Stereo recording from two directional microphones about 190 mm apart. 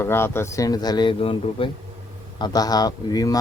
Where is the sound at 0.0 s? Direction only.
10° left (ahead or behind).